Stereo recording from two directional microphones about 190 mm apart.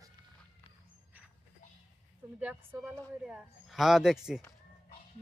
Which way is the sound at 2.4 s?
10° right (ahead or behind).